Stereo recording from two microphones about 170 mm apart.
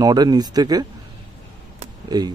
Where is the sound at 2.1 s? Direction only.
25° right (ahead or behind).